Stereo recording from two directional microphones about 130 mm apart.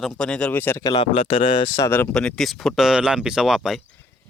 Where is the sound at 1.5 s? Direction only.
35° left (ahead or behind).